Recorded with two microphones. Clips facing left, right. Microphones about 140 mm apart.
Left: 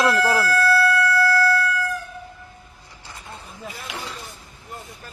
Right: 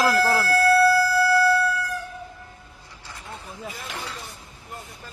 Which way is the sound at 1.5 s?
30° right (ahead or behind).